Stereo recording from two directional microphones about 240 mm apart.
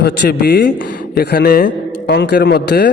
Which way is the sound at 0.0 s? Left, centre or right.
Left.